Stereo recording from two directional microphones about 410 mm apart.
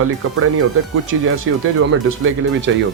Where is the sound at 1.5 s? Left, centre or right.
Right.